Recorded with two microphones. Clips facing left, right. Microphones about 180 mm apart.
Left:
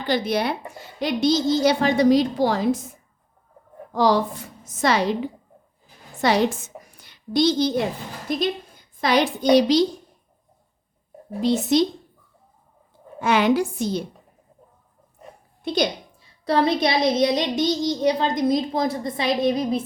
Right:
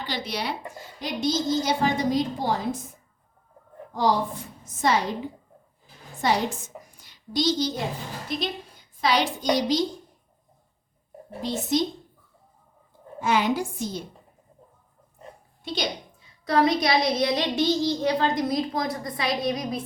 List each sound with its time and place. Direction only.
0.0 s speech: 50° left (ahead or behind)
0.9 s a woman's voice: 75° left (ahead or behind); by 2.6 s 90° left
3.9 s a woman's voice: 90° left
6.2 s a woman's voice: 80° left
6.8 s a sound: 65° left (ahead or behind)
9.0 s a child's voice: 55° left (ahead or behind); by 9.8 s 70° left (ahead or behind)
11.4 s a woman's voice: 75° left (ahead or behind)
13.1 s a woman's voice: 70° left (ahead or behind)
16.5 s speech: 30° left (ahead or behind)